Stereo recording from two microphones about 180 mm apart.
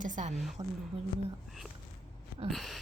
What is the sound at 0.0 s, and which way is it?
Speech, 45° right (ahead or behind).